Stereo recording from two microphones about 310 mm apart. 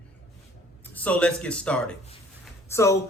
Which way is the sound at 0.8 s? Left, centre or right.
Centre.